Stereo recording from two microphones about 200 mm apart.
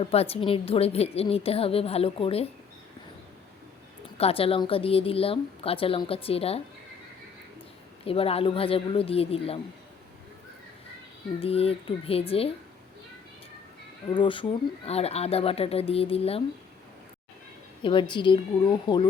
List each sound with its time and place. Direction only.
0.0 s a woman's voice: 30° left (ahead or behind)
4.2 s a woman's voice: 30° left (ahead or behind)
8.0 s a woman's voice: 30° left (ahead or behind)
11.3 s a woman's voice: 30° left (ahead or behind)
14.1 s a woman's voice: 25° left (ahead or behind)
17.8 s a woman's voice: 25° left (ahead or behind)